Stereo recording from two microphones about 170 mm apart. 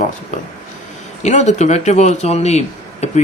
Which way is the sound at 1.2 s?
40° left (ahead or behind).